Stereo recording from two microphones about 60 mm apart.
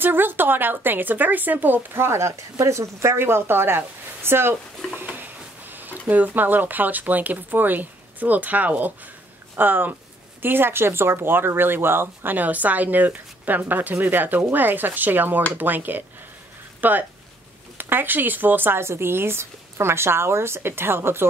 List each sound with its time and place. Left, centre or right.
0.0 s speech: right
3.2 s speech: right